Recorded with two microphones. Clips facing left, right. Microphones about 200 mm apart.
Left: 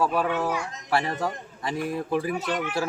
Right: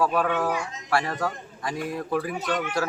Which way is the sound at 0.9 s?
25° left (ahead or behind).